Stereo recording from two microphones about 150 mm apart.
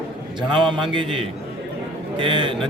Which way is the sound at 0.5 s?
35° right (ahead or behind).